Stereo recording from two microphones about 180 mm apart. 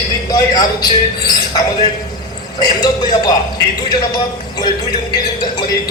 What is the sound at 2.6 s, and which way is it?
Speech, 25° left (ahead or behind).